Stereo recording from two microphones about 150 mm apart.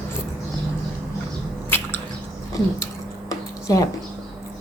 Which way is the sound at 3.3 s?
20° left (ahead or behind).